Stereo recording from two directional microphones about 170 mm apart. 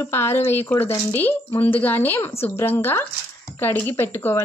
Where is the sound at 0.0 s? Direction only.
15° left (ahead or behind).